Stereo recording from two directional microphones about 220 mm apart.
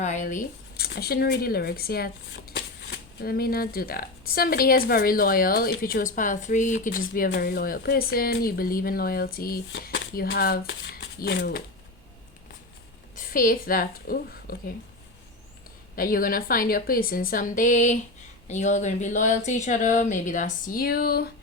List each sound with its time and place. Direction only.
0.0 s speech: 35° left (ahead or behind)
13.1 s a woman's voice: 40° left (ahead or behind)
16.0 s a woman's voice: 40° left (ahead or behind)